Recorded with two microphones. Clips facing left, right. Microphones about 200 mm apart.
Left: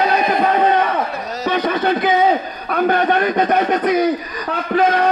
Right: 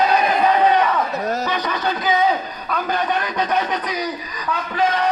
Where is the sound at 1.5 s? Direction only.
55° left (ahead or behind).